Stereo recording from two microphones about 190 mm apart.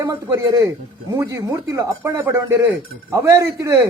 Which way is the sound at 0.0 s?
15° right (ahead or behind).